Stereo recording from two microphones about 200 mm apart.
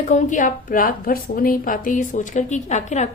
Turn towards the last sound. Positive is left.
turn(degrees=35)  # may be behind; listen again after turning